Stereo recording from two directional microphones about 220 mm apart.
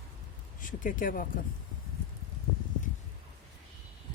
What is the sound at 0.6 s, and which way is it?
Speech, 35° left (ahead or behind).